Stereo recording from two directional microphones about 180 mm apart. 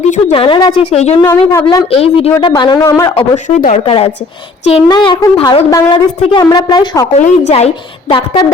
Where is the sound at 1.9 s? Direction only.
35° left (ahead or behind).